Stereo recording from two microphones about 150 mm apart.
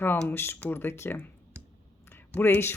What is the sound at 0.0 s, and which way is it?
Speech, 15° left (ahead or behind).